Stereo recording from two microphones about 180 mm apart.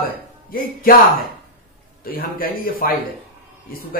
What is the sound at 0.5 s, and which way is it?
Speech, 55° left (ahead or behind).